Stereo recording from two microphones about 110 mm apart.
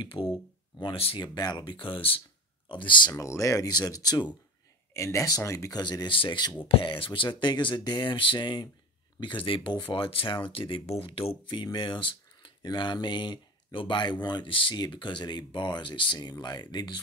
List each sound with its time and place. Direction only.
0.0 s speech: 55° left (ahead or behind)
1.2 s speech: 40° left (ahead or behind)
3.2 s speech: 30° left (ahead or behind)
4.9 s speech: 25° left (ahead or behind)
5.8 s speech: 40° left (ahead or behind)